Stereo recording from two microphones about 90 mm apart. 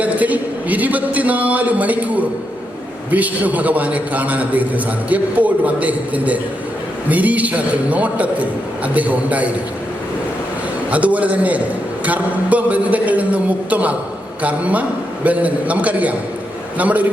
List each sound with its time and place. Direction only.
0.0 s a sound: 15° right (ahead or behind)
3.1 s a man's voice: 15° right (ahead or behind)
10.9 s a man's voice: 15° right (ahead or behind)